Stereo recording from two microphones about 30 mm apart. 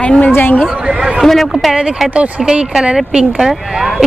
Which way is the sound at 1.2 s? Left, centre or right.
Centre.